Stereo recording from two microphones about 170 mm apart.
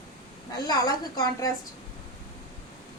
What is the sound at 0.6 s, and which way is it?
Speech, 20° left (ahead or behind).